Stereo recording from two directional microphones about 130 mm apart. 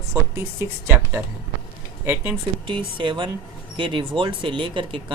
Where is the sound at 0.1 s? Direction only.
20° right (ahead or behind).